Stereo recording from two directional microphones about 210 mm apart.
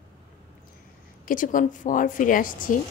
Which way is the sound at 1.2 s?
40° left (ahead or behind).